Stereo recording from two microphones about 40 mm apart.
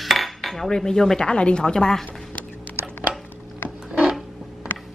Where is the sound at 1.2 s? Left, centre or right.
Left.